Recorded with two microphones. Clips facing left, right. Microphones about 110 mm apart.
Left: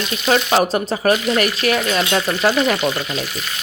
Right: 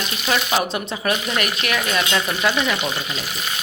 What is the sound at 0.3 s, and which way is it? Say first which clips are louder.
Speech: left 6 dB; 40° left (ahead or behind).